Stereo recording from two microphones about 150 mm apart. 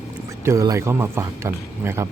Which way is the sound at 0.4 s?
20° right (ahead or behind).